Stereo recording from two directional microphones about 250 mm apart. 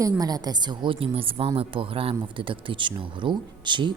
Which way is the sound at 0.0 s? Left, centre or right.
Centre.